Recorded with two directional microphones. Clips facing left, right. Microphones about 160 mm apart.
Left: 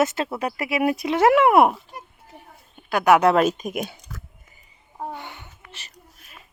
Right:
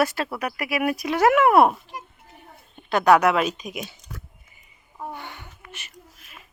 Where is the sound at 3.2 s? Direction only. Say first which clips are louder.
Left 4 dB; 45° left (ahead or behind).